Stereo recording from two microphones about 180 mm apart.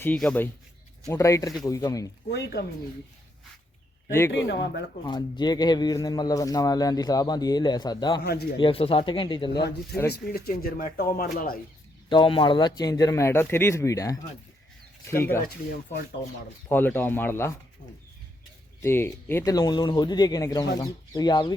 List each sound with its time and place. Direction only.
0.0 s a man's voice: 10° left (ahead or behind)
2.3 s a man's voice: 65° left (ahead or behind)
4.3 s a man's voice: 75° left (ahead or behind)
5.0 s a man's voice: 25° left (ahead or behind)
8.2 s speech: 60° left (ahead or behind)
8.5 s a man's voice: 30° left (ahead or behind)
9.5 s speech: 65° left (ahead or behind)
12.0 s a man's voice: 25° left (ahead or behind)
16.6 s speech: 10° left (ahead or behind)
18.8 s a man's voice: 15° left (ahead or behind)